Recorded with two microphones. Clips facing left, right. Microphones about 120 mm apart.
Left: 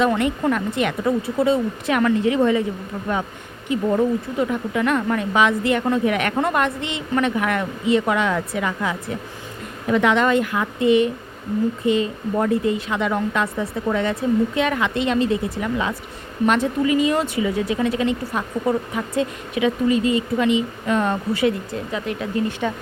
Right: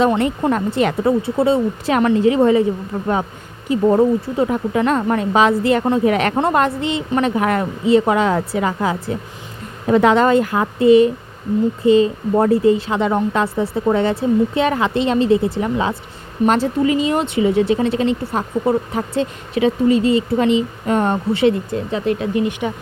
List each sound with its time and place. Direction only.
0.1 s speech: 25° right (ahead or behind)
3.7 s speech: 35° right (ahead or behind)
22.4 s speech: 15° right (ahead or behind)